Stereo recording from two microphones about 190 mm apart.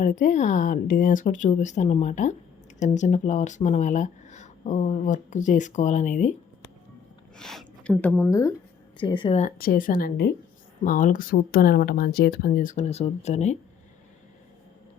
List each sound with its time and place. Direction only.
0.0 s speech: 45° left (ahead or behind)
7.3 s speech: 5° left (ahead or behind); by 9.4 s 25° left (ahead or behind)
9.4 s speech: 50° left (ahead or behind)